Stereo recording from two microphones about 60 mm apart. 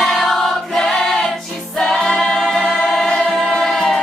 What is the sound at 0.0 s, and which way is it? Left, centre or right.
Choir, centre.